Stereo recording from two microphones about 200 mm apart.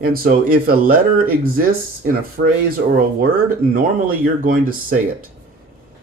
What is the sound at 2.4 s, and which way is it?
Speech, 55° right (ahead or behind).